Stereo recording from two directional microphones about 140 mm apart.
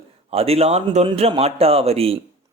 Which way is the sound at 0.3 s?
45° right (ahead or behind).